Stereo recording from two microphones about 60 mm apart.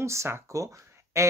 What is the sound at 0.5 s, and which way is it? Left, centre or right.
Speech, right.